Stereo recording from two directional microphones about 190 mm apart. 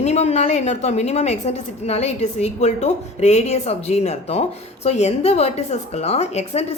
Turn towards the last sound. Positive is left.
turn(degrees=35)  # may be behind; listen again after turning